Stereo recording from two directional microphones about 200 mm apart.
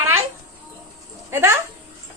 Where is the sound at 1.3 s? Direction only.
10° right (ahead or behind).